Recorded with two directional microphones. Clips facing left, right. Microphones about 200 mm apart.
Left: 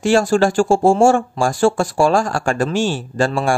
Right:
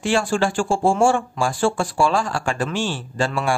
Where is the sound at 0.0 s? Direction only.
40° left (ahead or behind).